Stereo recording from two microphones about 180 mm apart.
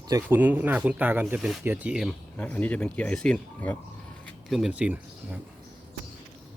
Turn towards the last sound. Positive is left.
turn(degrees=-10)  # may be behind; listen again after turning